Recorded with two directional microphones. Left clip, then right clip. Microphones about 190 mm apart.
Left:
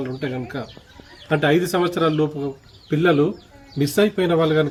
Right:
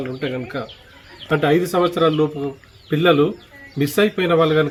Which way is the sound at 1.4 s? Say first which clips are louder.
Right 2 dB; 30° left (ahead or behind).